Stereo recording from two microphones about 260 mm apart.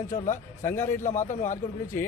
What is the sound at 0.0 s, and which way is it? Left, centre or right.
A man's voice, centre.